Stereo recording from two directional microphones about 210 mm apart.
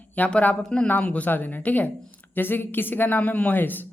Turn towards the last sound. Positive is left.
turn(degrees=10)  # may be behind; listen again after turning